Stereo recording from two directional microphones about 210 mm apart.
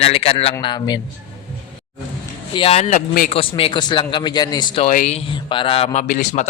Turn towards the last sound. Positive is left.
turn(degrees=35)  # may be behind; listen again after turning